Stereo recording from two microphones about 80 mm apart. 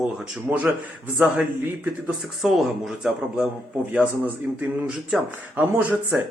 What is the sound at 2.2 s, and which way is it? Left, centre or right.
Speech, centre.